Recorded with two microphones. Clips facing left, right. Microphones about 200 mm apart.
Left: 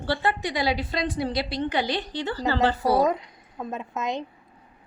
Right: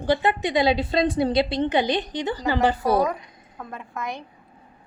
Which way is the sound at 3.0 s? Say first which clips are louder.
Left 1 dB; 20° left (ahead or behind).